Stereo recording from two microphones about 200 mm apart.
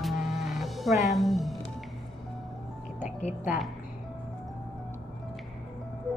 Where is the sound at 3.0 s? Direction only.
35° left (ahead or behind).